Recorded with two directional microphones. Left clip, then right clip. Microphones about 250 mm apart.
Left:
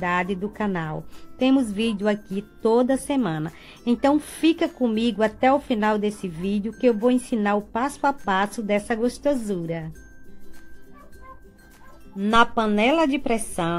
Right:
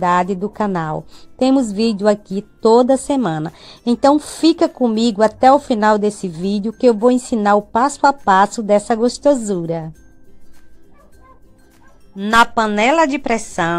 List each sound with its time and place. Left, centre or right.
0.0 s a woman's voice: centre
12.2 s a woman's voice: centre